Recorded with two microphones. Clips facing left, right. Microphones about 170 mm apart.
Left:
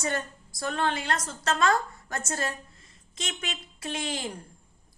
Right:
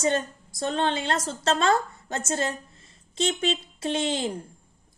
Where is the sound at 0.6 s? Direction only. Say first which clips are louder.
Right 3 dB; 25° right (ahead or behind).